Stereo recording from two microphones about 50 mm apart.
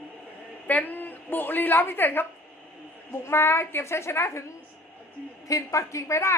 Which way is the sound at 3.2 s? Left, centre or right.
Left.